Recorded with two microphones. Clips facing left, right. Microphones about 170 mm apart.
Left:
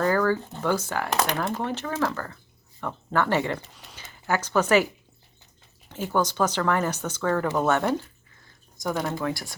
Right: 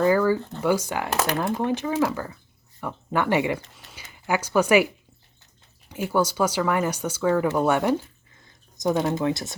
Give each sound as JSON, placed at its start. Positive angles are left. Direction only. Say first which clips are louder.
{"t": 0.0, "sound": "a sound", "louder": "right 3 dB", "side_deg": -10}
{"t": 0.6, "sound": "speech", "louder": "right 3 dB", "side_deg": -10}
{"t": 3.6, "sound": "speech", "louder": "left 1 dB", "side_deg": 0}
{"t": 5.9, "sound": "speech", "louder": "right 2 dB", "side_deg": -10}